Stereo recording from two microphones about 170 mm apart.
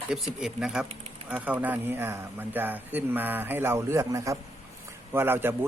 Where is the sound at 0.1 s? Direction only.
5° right (ahead or behind).